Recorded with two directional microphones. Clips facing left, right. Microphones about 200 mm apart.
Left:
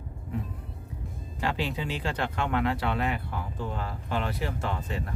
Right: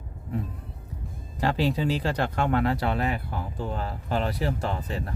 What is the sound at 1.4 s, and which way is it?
Speech, 40° right (ahead or behind).